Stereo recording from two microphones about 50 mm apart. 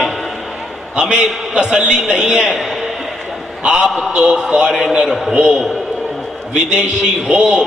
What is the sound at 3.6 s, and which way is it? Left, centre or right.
A man's voice, centre.